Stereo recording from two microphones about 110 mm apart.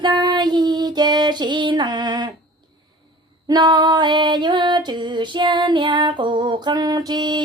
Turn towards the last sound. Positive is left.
turn(degrees=-40)  # may be behind; listen again after turning